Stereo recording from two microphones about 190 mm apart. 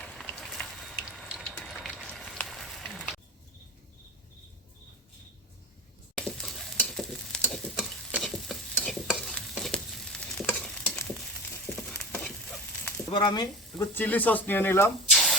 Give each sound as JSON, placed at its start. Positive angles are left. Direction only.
{"t": 0.0, "sound": "a sound", "side_deg": 5}
{"t": 1.5, "sound": "fire", "side_deg": 5}
{"t": 6.1, "sound": "stir", "side_deg": 5}
{"t": 13.1, "sound": "speech", "side_deg": 25}
{"t": 13.9, "sound": "speech", "side_deg": 10}
{"t": 15.1, "sound": "a sound", "side_deg": 0}